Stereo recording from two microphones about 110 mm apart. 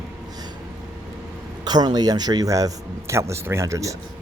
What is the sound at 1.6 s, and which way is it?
Speech, 40° right (ahead or behind).